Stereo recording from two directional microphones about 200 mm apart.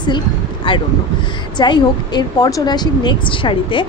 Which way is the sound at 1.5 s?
20° left (ahead or behind).